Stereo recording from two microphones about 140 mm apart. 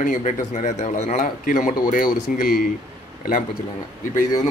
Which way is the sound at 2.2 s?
80° left.